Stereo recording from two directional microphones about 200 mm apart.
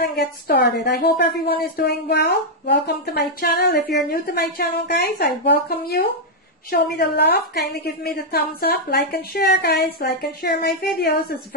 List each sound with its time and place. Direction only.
0.0 s a woman's voice: 50° left (ahead or behind)